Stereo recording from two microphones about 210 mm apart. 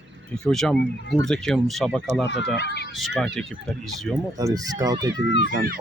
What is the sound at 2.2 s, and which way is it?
Speech, 55° left (ahead or behind).